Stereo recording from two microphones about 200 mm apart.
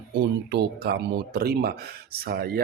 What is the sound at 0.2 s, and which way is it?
Speech, 55° right (ahead or behind).